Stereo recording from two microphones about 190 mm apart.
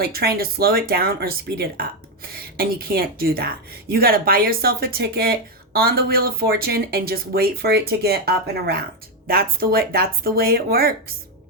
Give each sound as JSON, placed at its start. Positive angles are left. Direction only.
{"t": 0.0, "sound": "a woman's voice", "side_deg": -55}